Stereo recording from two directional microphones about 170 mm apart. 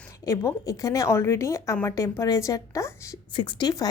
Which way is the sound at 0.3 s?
20° left (ahead or behind).